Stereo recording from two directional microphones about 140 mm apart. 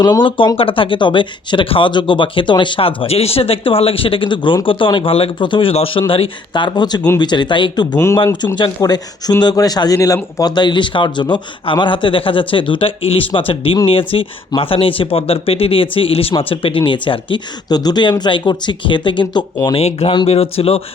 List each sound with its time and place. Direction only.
0.0 s speech: 30° left (ahead or behind)
7.9 s speech: 20° left (ahead or behind)
8.2 s speech: 30° left (ahead or behind)
19.7 s speech: 45° left (ahead or behind)